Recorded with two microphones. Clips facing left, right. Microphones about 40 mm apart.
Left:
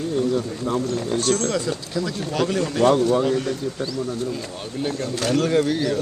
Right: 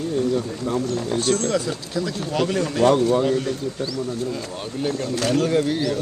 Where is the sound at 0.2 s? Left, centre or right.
Left.